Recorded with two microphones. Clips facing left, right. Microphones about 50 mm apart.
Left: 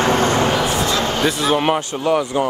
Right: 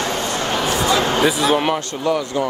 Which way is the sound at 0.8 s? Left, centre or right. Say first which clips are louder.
Right 2 dB; right.